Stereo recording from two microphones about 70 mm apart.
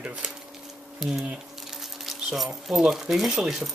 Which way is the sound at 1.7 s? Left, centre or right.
Centre.